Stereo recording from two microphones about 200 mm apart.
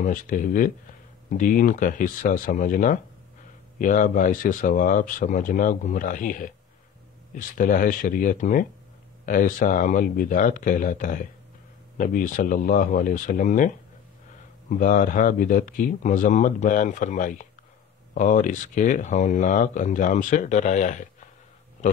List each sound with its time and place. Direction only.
0.0 s speech: 40° left (ahead or behind)
14.7 s speech: 40° left (ahead or behind)